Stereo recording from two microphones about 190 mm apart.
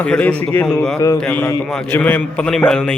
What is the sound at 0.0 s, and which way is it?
Speech, 5° left (ahead or behind).